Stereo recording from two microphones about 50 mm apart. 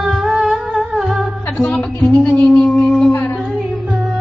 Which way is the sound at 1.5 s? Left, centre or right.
Left.